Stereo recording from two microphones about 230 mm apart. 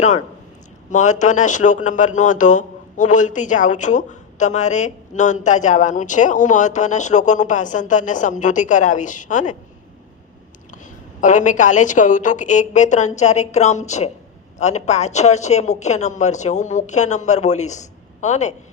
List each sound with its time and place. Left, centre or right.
0.9 s speech: left
11.2 s speech: left